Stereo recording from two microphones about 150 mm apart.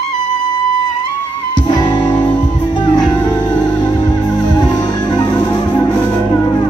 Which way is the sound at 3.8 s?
30° left (ahead or behind).